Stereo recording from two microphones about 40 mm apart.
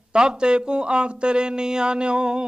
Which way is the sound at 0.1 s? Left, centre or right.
Right.